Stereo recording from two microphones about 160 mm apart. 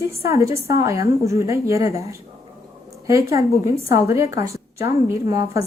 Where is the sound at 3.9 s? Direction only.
20° right (ahead or behind).